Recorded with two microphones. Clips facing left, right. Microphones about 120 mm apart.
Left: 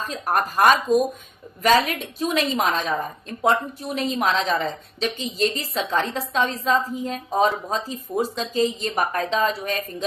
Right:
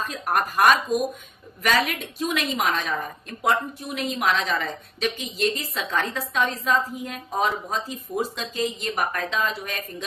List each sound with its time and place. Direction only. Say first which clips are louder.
0.0 s a woman's voice: left 1 dB; 35° left (ahead or behind)